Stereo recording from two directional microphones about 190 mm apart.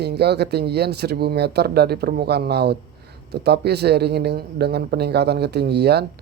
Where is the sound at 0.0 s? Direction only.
60° right (ahead or behind).